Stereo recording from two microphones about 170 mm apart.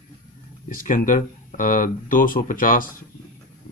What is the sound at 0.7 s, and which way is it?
Speech, 50° left (ahead or behind).